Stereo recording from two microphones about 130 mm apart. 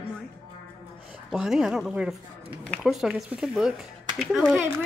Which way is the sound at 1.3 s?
5° right (ahead or behind).